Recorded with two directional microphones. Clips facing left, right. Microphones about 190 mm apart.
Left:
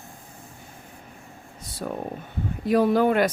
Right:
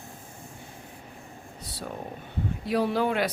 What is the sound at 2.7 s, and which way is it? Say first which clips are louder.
Speech: left 6 dB; 50° left (ahead or behind).